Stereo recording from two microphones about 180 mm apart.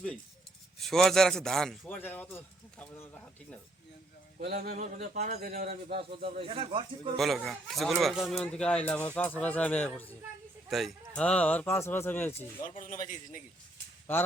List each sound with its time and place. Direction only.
0.8 s speech: centre (ahead or behind)
4.8 s speech: 40° right (ahead or behind)
7.2 s speech: centre (ahead or behind)
12.8 s a man's voice: 45° left (ahead or behind)